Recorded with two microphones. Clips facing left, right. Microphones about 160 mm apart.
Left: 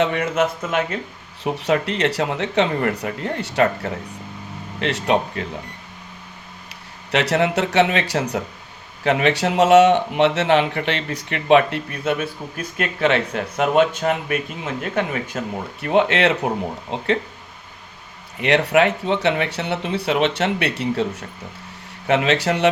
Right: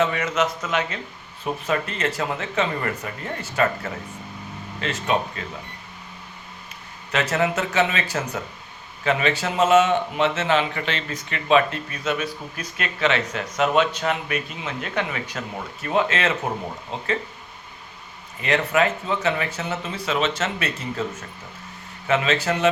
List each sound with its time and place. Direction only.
0.0 s a man's voice: 60° left (ahead or behind)
1.5 s speech: 75° left (ahead or behind)
7.1 s speech: 70° left (ahead or behind); by 15.4 s 50° left (ahead or behind)
15.8 s speech: 70° left (ahead or behind)
18.3 s speech: 70° left (ahead or behind)